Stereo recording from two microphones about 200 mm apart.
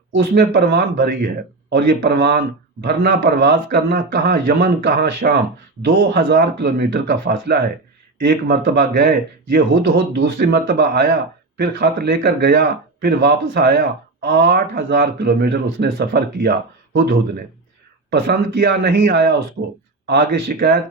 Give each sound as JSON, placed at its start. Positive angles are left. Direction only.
{"t": 0.1, "sound": "speech", "side_deg": -55}